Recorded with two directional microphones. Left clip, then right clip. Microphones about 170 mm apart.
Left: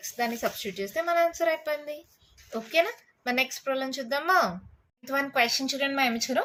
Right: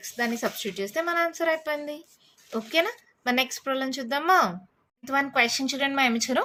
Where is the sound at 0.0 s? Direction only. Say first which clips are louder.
Right 1 dB; 30° right (ahead or behind).